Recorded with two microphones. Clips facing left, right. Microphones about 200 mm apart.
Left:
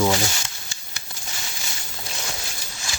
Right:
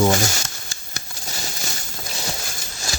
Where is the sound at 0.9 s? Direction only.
40° right (ahead or behind).